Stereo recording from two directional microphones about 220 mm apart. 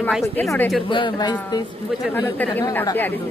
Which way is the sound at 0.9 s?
20° left (ahead or behind).